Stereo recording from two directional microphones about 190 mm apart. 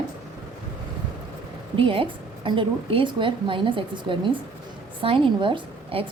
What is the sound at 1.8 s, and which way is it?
Speech, 30° right (ahead or behind).